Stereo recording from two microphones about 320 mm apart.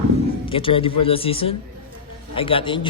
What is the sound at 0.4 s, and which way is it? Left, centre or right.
Speech, centre.